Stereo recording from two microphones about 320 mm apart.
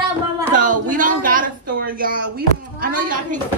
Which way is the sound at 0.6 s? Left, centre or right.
Right.